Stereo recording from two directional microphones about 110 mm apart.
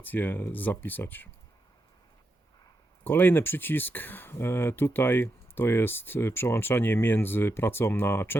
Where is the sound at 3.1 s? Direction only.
20° left (ahead or behind).